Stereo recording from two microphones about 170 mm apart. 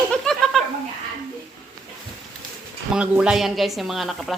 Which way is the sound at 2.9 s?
5° right (ahead or behind).